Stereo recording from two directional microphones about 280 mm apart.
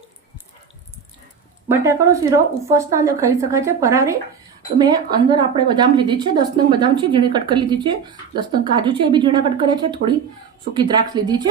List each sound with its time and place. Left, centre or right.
1.6 s a woman's voice: centre